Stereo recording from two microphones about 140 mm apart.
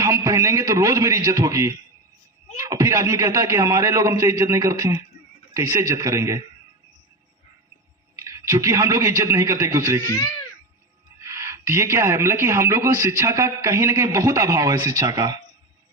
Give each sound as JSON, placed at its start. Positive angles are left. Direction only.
{"t": 0.0, "sound": "speech", "side_deg": -20}
{"t": 8.1, "sound": "a man's voice", "side_deg": -20}
{"t": 10.1, "sound": "speech", "side_deg": 25}
{"t": 11.2, "sound": "speech", "side_deg": -20}